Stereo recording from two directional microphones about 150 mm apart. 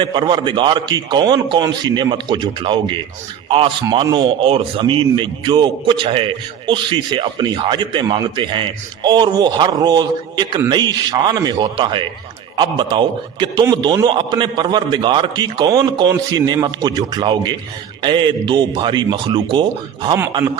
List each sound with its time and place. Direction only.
0.0 s a man's voice: 30° right (ahead or behind)